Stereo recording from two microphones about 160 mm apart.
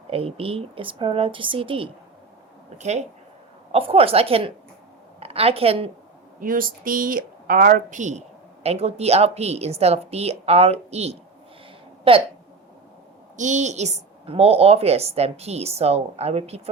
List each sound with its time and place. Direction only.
0.1 s a woman's voice: 35° right (ahead or behind)
2.7 s a woman's voice: 45° right (ahead or behind)
6.4 s a woman's voice: 60° right (ahead or behind); by 12.2 s 35° right (ahead or behind)
13.3 s a woman's voice: 50° right (ahead or behind)